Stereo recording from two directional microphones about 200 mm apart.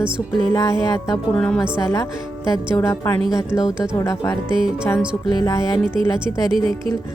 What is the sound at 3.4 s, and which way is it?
Speech, 5° right (ahead or behind).